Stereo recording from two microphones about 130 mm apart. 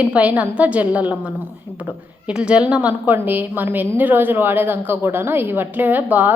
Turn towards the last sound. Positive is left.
turn(degrees=-15)  # may be behind; listen again after turning